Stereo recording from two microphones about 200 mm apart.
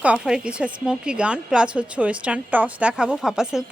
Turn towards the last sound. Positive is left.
turn(degrees=-5)  # may be behind; listen again after turning